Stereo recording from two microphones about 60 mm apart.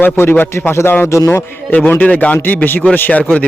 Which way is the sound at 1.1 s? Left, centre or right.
Left.